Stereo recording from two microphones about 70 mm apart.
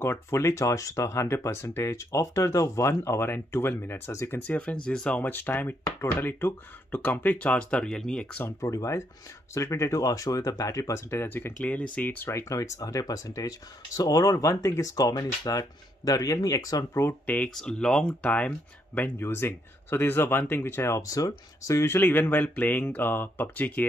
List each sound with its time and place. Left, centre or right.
0.0 s speech: left
4.1 s speech: left
4.4 s speech: centre
5.3 s speech: left
7.8 s speech: centre
8.5 s speech: left
12.3 s speech: left
17.6 s speech: centre
18.2 s speech: centre
18.9 s speech: left
21.0 s speech: left
21.9 s speech: left